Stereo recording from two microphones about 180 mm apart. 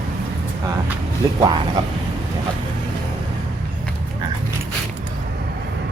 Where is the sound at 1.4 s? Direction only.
25° right (ahead or behind).